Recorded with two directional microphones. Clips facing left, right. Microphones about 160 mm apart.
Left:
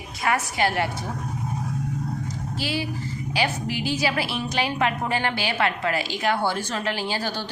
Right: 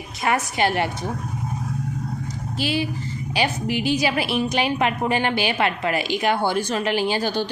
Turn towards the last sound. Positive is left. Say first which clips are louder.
# right 6 dB
turn(degrees=-15)  # may be behind; listen again after turning